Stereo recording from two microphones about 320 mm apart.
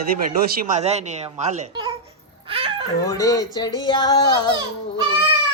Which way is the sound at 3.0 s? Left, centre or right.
Centre.